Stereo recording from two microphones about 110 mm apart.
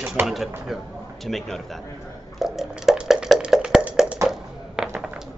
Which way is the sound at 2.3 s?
Centre (ahead or behind).